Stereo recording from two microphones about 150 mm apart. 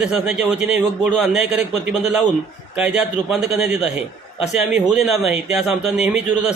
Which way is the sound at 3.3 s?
Centre (ahead or behind).